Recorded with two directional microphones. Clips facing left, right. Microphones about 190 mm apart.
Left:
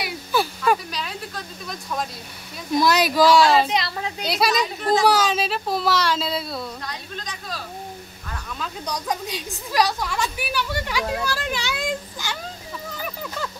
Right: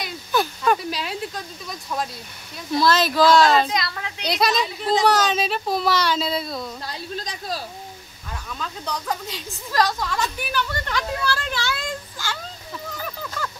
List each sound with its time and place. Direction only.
0.0 s a sound: 5° left (ahead or behind)
1.7 s speech: centre (ahead or behind)
2.7 s speech: 15° left (ahead or behind)
3.7 s a woman's voice: 30° left (ahead or behind)
4.2 s speech: 5° left (ahead or behind)
6.9 s speech: 35° right (ahead or behind)
8.5 s speech: 15° left (ahead or behind)
12.9 s a sound: 15° left (ahead or behind)